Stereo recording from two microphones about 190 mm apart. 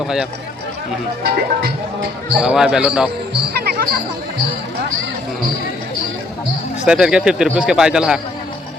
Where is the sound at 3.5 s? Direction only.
55° right (ahead or behind).